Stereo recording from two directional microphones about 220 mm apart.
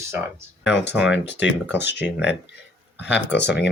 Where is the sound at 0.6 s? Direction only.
50° left (ahead or behind).